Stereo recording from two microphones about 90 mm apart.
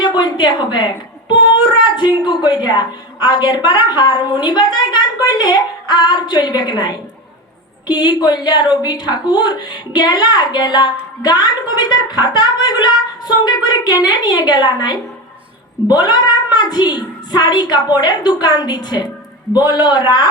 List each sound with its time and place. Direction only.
0.0 s a woman's voice: 55° left (ahead or behind)